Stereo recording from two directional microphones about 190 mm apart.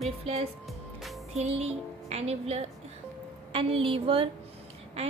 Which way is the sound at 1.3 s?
35° right (ahead or behind).